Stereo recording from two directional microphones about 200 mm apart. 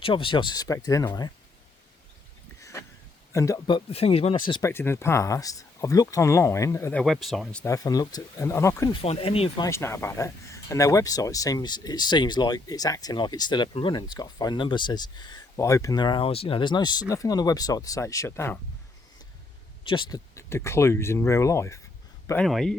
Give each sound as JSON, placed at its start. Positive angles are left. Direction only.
{"t": 0.0, "sound": "speech", "side_deg": 25}
{"t": 2.6, "sound": "a sound", "side_deg": 15}
{"t": 3.3, "sound": "speech", "side_deg": 15}
{"t": 4.7, "sound": "speech", "side_deg": 10}
{"t": 7.0, "sound": "speech", "side_deg": 0}
{"t": 8.9, "sound": "speech", "side_deg": 30}
{"t": 9.6, "sound": "speech", "side_deg": 15}
{"t": 19.8, "sound": "speech", "side_deg": 25}
{"t": 22.3, "sound": "speech", "side_deg": 5}